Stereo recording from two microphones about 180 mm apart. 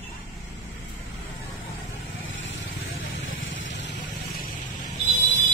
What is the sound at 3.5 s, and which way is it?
Vehicle, 90° left.